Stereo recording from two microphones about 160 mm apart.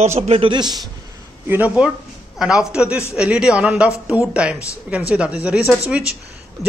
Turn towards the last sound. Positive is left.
turn(degrees=-5)  # may be behind; listen again after turning